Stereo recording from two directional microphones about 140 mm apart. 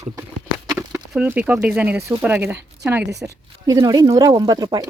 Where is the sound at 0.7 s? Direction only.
20° right (ahead or behind).